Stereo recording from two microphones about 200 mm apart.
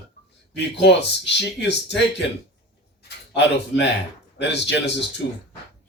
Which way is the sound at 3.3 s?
60° left (ahead or behind).